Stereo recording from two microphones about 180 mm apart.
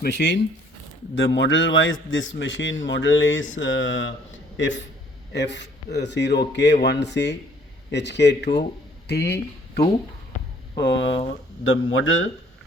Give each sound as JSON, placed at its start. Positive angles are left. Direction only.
{"t": 0.0, "sound": "a man's voice", "side_deg": 75}
{"t": 1.1, "sound": "a man's voice", "side_deg": 90}
{"t": 5.3, "sound": "a man's voice", "side_deg": 75}
{"t": 10.8, "sound": "a man's voice", "side_deg": 80}